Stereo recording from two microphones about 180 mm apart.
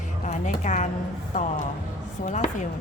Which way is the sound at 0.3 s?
40° left (ahead or behind).